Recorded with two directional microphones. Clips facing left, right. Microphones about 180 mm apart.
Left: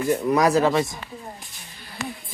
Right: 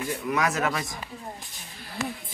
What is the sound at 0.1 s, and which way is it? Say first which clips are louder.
Speech: left 9 dB; 40° left (ahead or behind).